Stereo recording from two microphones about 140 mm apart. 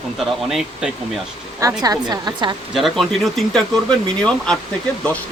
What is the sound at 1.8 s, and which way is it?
Speech, 25° right (ahead or behind).